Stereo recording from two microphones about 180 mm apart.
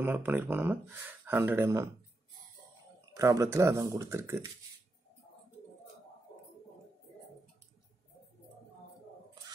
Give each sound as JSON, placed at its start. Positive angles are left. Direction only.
{"t": 0.0, "sound": "speech", "side_deg": -10}
{"t": 3.2, "sound": "speech", "side_deg": -15}